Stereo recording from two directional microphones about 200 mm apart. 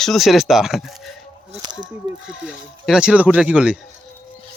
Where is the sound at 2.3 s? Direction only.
5° right (ahead or behind).